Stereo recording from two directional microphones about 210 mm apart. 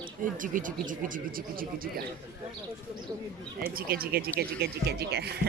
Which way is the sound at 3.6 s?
45° right (ahead or behind).